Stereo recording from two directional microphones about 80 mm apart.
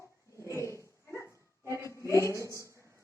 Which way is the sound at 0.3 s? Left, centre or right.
Left.